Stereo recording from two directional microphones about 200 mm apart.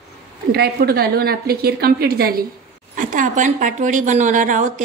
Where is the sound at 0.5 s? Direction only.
55° right (ahead or behind).